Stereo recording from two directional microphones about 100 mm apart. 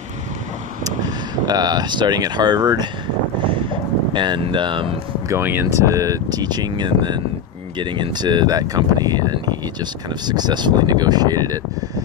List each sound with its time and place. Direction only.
0.8 s speech: 40° right (ahead or behind)
3.3 s wind: 55° right (ahead or behind)
5.3 s speech: 20° right (ahead or behind); by 11.6 s 40° right (ahead or behind)